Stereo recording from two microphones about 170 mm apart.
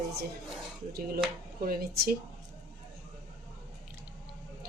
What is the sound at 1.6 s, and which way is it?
Speech, 60° right (ahead or behind).